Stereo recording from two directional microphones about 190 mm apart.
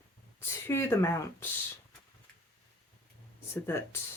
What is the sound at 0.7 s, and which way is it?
Speech, 15° left (ahead or behind).